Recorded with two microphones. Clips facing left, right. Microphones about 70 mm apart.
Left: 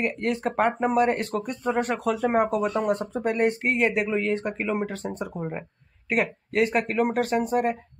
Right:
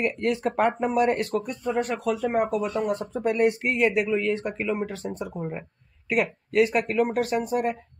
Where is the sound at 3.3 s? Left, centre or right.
Left.